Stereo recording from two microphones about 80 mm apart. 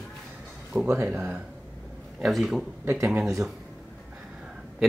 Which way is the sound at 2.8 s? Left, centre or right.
Right.